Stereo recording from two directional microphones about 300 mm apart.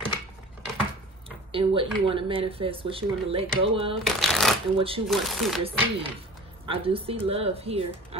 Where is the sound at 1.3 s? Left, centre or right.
Centre.